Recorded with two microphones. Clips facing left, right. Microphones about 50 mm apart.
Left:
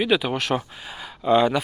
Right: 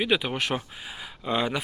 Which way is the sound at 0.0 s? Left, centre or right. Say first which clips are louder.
Left 4 dB; centre.